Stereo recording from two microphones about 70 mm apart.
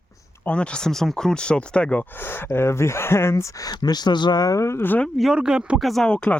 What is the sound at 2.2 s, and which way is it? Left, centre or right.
Speech, left.